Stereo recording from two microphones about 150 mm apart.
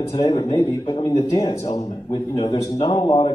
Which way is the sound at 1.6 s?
45° left (ahead or behind).